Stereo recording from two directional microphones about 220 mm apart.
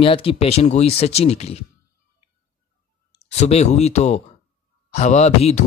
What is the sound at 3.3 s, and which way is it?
Speech, 30° left (ahead or behind).